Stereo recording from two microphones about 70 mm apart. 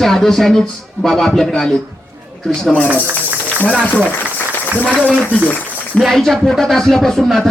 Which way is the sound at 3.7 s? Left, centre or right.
Right.